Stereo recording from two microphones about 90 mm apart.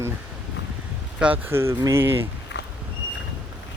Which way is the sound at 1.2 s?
15° right (ahead or behind).